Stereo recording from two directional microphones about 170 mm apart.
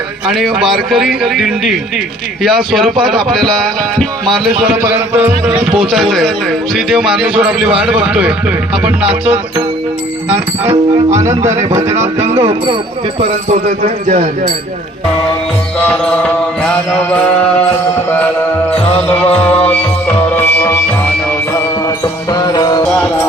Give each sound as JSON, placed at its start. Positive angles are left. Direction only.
{"t": 0.3, "sound": "speech", "side_deg": 0}
{"t": 12.4, "sound": "speech", "side_deg": -30}
{"t": 13.1, "sound": "speech", "side_deg": -40}
{"t": 15.8, "sound": "music", "side_deg": 10}
{"t": 22.8, "sound": "music", "side_deg": 5}